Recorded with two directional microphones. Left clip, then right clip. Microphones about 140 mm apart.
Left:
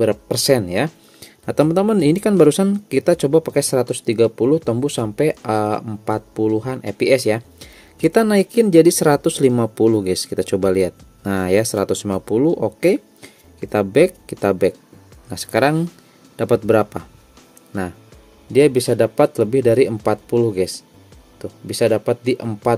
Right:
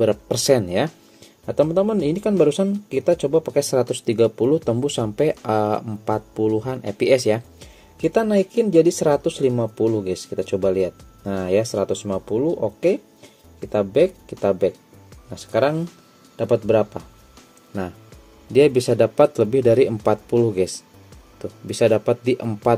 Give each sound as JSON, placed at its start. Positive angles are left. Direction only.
{"t": 0.0, "sound": "speech", "side_deg": 20}
{"t": 1.2, "sound": "speech", "side_deg": 45}
{"t": 3.5, "sound": "speech", "side_deg": 25}
{"t": 7.5, "sound": "speech", "side_deg": 35}
{"t": 18.5, "sound": "speech", "side_deg": 15}